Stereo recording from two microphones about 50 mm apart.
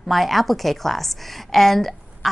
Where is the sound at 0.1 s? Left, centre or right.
Centre.